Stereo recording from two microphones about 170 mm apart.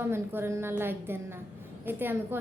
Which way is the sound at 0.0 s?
15° right (ahead or behind).